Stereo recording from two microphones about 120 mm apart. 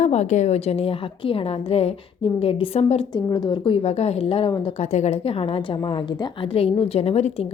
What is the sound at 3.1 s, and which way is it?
Speech, 35° left (ahead or behind).